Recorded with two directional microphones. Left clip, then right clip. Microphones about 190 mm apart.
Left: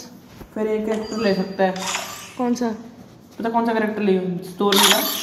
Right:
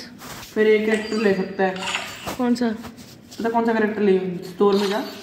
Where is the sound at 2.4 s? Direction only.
Centre (ahead or behind).